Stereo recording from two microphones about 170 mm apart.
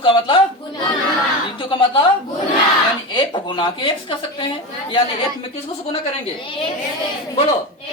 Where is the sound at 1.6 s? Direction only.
30° left (ahead or behind).